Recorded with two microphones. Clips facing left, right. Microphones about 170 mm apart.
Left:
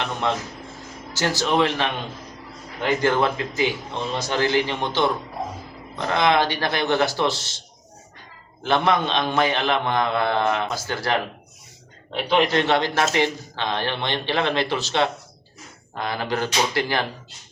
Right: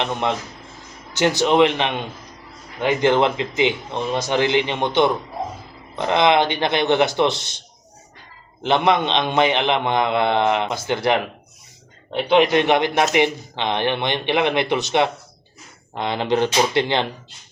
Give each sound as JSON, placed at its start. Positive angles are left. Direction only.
{"t": 0.0, "sound": "a man's voice", "side_deg": -20}
{"t": 8.6, "sound": "a man's voice", "side_deg": -20}
{"t": 12.3, "sound": "a man's voice", "side_deg": -15}
{"t": 16.0, "sound": "a man's voice", "side_deg": -20}